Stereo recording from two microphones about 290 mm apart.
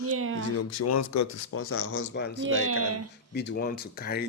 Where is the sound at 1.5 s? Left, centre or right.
Left.